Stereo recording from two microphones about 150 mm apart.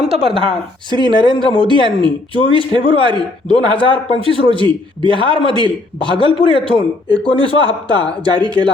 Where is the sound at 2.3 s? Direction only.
35° left (ahead or behind).